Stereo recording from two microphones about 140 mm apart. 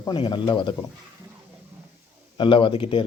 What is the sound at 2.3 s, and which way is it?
Speech, 35° left (ahead or behind).